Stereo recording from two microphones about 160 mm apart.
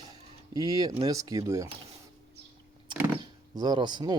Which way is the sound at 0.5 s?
25° right (ahead or behind).